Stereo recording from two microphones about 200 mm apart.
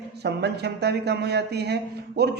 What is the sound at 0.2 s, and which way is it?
A man's voice, 55° right (ahead or behind).